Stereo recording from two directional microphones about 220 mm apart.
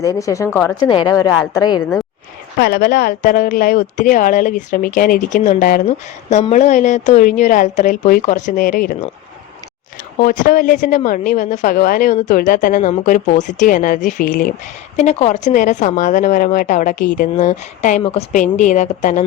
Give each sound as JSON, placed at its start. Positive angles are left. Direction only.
{"t": 0.0, "sound": "speech", "side_deg": 15}
{"t": 0.8, "sound": "a woman's voice", "side_deg": 20}
{"t": 2.6, "sound": "a woman's voice", "side_deg": 45}
{"t": 10.2, "sound": "a woman's voice", "side_deg": 40}